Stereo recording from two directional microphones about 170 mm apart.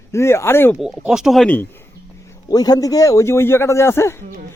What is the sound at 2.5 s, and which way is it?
Speech, 25° left (ahead or behind).